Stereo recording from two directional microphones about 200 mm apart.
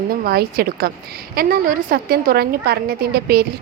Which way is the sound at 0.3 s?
50° right (ahead or behind).